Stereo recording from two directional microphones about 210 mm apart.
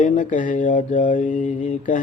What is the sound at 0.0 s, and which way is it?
Mantra, 40° left (ahead or behind).